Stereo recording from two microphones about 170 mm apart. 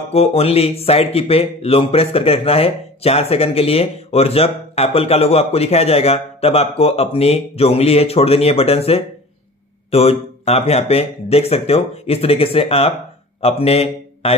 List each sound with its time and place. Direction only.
0.1 s a man's voice: 35° left (ahead or behind)